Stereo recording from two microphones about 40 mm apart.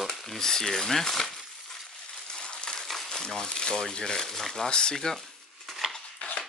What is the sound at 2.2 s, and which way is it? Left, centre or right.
Coin, left.